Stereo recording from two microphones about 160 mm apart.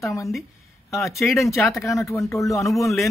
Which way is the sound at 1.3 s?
20° left (ahead or behind).